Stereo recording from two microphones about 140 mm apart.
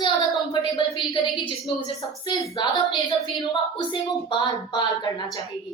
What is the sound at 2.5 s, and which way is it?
Speech, 30° left (ahead or behind).